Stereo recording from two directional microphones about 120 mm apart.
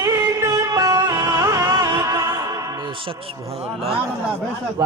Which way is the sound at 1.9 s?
30° right (ahead or behind).